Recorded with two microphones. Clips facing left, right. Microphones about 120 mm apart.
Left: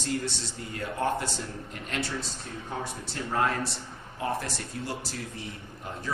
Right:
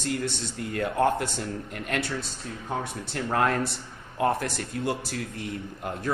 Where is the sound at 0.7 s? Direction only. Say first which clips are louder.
Right 5 dB; 55° right (ahead or behind).